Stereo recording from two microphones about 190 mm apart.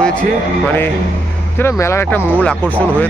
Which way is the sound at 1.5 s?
15° left (ahead or behind).